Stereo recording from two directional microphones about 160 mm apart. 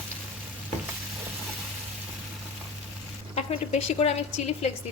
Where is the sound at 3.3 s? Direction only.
40° left (ahead or behind).